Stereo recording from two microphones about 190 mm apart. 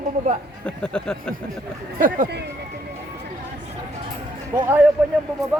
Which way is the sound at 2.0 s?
45° right (ahead or behind).